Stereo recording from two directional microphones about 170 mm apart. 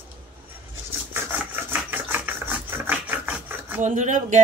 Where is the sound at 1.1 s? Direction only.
10° right (ahead or behind).